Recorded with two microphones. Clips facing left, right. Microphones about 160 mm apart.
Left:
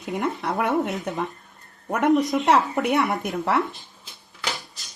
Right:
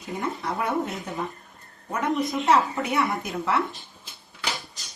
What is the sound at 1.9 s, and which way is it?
A woman's voice, 70° left (ahead or behind).